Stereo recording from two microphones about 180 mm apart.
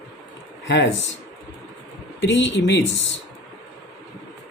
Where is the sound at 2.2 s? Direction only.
80° left.